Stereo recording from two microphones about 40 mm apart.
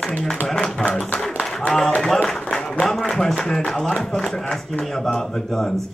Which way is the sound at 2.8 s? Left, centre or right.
Centre.